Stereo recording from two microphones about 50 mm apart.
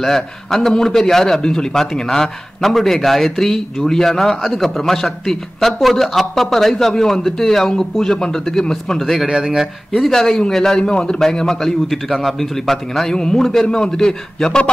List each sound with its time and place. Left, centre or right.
0.0 s a man's voice: centre
9.4 s speech: centre
10.1 s a man's voice: centre